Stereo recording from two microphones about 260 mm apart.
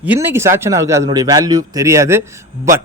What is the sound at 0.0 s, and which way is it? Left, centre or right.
A man's voice, centre.